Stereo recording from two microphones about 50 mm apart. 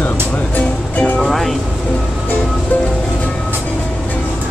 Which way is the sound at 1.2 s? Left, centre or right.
Centre.